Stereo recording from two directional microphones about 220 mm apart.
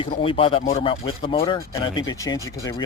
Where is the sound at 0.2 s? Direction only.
25° left (ahead or behind).